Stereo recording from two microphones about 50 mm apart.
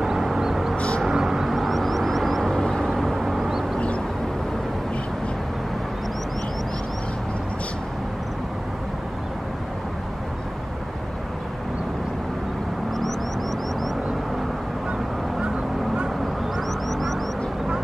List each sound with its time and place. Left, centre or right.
0.0 s music: centre
1.0 s vehicle: centre
16.5 s a sound: centre